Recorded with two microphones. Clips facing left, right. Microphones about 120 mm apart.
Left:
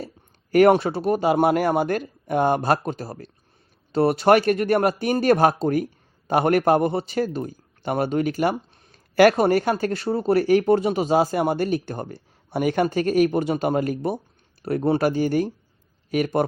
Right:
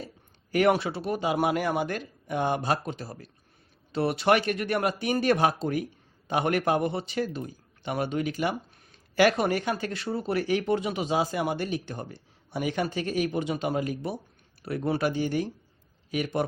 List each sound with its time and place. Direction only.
0.5 s a man's voice: 50° left (ahead or behind)